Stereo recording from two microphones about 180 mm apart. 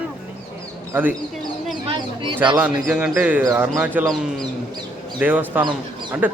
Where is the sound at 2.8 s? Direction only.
Centre (ahead or behind).